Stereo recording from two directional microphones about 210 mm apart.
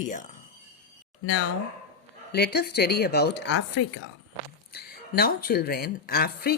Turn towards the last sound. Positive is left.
turn(degrees=45)  # may be behind; listen again after turning